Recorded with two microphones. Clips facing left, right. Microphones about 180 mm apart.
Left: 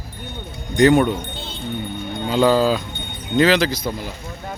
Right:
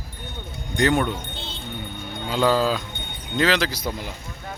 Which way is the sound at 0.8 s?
15° left (ahead or behind).